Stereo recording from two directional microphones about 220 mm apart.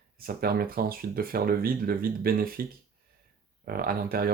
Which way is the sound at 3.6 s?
45° right (ahead or behind).